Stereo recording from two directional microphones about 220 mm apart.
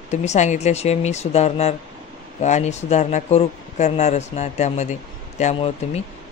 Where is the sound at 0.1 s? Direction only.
30° left (ahead or behind).